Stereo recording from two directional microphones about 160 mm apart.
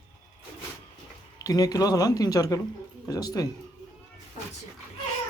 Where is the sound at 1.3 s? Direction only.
25° left (ahead or behind).